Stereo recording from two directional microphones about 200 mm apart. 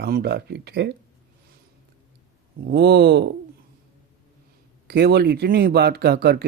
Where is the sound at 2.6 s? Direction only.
55° right (ahead or behind).